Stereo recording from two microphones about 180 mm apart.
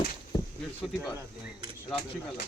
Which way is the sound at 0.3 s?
20° left (ahead or behind).